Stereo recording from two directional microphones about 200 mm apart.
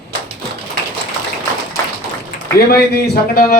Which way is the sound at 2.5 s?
50° left (ahead or behind).